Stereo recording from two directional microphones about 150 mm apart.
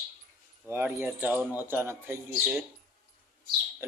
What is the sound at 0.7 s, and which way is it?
Speech, 15° right (ahead or behind).